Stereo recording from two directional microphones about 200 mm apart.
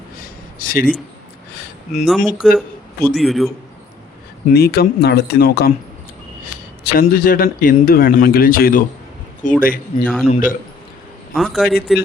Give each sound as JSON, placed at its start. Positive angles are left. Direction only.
{"t": 0.2, "sound": "a sound", "side_deg": 45}
{"t": 2.0, "sound": "a man's voice", "side_deg": 0}
{"t": 4.4, "sound": "a man's voice", "side_deg": 50}
{"t": 6.8, "sound": "a man's voice", "side_deg": 45}
{"t": 10.2, "sound": "speech", "side_deg": 35}
{"t": 11.3, "sound": "a man's voice", "side_deg": 0}